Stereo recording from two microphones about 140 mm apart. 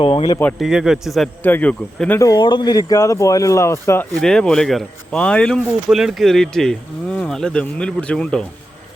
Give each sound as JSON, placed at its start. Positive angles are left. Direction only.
{"t": 0.0, "sound": "speech", "side_deg": 40}
{"t": 0.6, "sound": "speech", "side_deg": -5}
{"t": 1.4, "sound": "speech", "side_deg": 10}
{"t": 2.2, "sound": "speech", "side_deg": 30}
{"t": 4.2, "sound": "speech", "side_deg": 5}